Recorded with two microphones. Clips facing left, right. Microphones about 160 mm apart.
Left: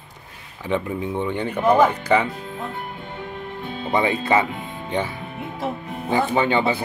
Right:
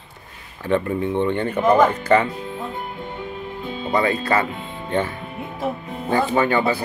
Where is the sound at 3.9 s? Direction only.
20° left (ahead or behind).